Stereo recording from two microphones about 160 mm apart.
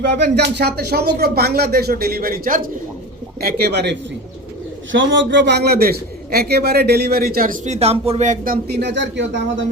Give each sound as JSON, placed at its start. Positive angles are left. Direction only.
{"t": 0.0, "sound": "a man's voice", "side_deg": -90}
{"t": 3.4, "sound": "speech", "side_deg": -85}
{"t": 5.3, "sound": "a man's voice", "side_deg": -90}
{"t": 8.7, "sound": "speech", "side_deg": -90}